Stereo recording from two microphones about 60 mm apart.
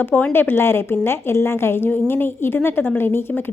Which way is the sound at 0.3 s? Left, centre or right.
Left.